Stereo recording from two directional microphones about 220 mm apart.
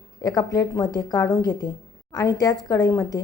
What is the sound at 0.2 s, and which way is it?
A woman's voice, 15° left (ahead or behind).